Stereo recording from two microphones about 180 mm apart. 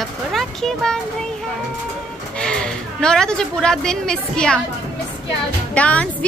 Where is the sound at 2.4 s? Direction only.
5° left (ahead or behind).